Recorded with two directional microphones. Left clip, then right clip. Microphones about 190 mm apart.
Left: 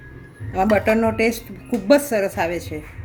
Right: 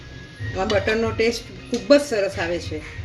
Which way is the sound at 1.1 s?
65° left (ahead or behind).